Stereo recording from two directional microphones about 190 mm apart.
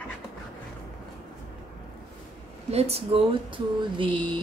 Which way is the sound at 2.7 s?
35° right (ahead or behind).